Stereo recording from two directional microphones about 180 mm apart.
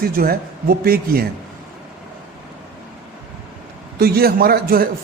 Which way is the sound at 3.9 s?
60° right (ahead or behind).